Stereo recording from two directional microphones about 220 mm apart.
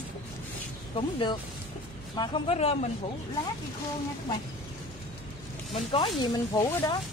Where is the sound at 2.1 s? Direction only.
20° left (ahead or behind).